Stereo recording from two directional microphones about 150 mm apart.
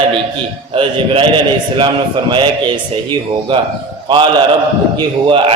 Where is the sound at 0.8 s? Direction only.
35° right (ahead or behind).